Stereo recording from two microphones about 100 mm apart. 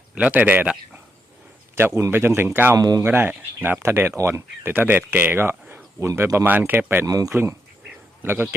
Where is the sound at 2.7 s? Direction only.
40° right (ahead or behind).